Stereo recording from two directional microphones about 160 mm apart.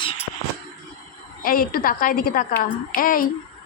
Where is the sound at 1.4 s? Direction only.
65° left (ahead or behind).